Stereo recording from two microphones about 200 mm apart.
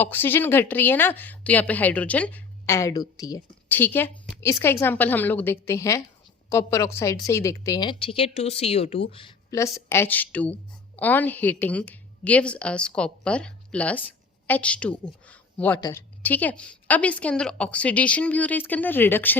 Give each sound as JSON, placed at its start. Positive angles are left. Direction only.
{"t": 0.0, "sound": "a woman's voice", "side_deg": 10}
{"t": 9.1, "sound": "a woman's voice", "side_deg": 20}